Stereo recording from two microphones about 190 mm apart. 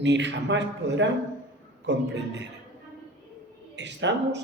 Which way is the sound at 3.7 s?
65° right (ahead or behind).